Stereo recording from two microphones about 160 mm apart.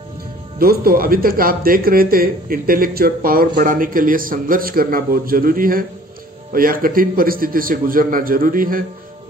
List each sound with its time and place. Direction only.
0.6 s speech: 70° right (ahead or behind)